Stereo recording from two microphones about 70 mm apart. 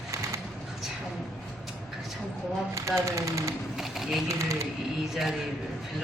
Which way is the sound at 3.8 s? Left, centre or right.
Centre.